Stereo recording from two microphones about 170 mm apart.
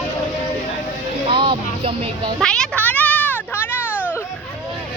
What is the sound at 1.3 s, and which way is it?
Music, 30° right (ahead or behind).